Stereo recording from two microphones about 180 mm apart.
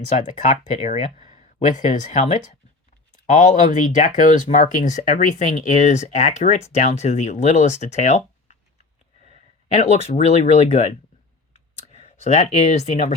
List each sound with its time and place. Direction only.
0.2 s speech: 45° left (ahead or behind)
11.9 s speech: 35° left (ahead or behind)